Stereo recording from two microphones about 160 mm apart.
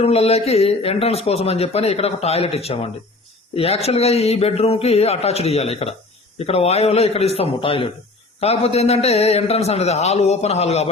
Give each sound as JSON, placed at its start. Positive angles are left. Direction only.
{"t": 0.0, "sound": "speech", "side_deg": 40}